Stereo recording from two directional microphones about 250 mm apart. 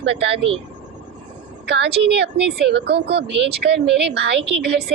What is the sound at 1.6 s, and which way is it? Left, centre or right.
A woman's voice, right.